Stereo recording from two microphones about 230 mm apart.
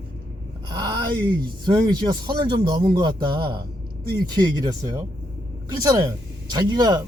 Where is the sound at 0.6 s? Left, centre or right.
Centre.